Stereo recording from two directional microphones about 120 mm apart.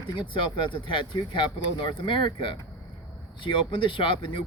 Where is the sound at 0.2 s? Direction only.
40° left (ahead or behind).